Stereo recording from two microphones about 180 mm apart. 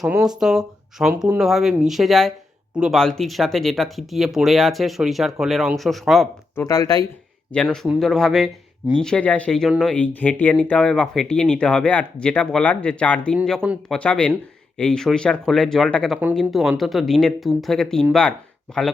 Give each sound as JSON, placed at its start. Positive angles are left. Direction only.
{"t": 0.0, "sound": "speech", "side_deg": -5}
{"t": 6.6, "sound": "speech", "side_deg": 20}
{"t": 7.5, "sound": "speech", "side_deg": 5}